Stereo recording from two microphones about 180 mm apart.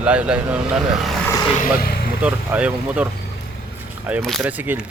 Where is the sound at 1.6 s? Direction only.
55° left (ahead or behind).